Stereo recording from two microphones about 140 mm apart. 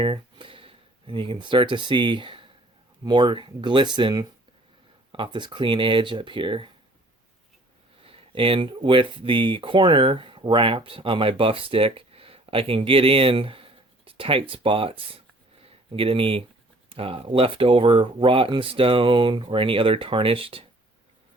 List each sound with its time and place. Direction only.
0.0 s speech: 40° right (ahead or behind)
8.0 s speech: 40° right (ahead or behind)